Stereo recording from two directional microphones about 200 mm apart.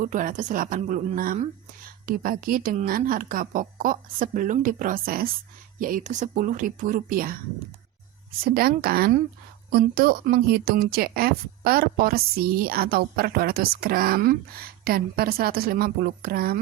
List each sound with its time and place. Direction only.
0.0 s speech: 40° right (ahead or behind)
8.4 s speech: 45° right (ahead or behind)